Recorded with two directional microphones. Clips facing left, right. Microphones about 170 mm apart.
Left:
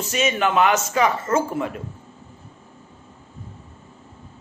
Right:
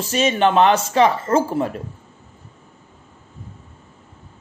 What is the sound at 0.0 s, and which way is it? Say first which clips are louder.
A man's voice: right 4 dB; 30° right (ahead or behind).